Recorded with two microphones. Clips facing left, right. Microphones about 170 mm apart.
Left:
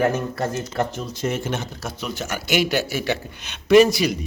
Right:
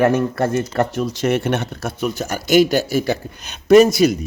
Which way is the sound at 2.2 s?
40° right (ahead or behind).